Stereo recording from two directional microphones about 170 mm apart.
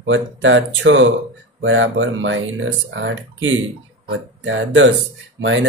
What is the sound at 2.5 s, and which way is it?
Speech, 90° right.